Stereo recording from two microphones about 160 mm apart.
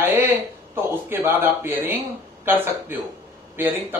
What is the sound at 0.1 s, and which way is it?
A man's voice, 15° right (ahead or behind).